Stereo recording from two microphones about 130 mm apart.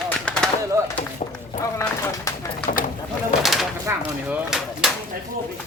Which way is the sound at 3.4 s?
Centre (ahead or behind).